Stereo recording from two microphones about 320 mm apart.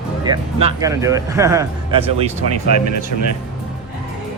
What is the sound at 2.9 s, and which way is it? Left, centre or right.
Speech, right.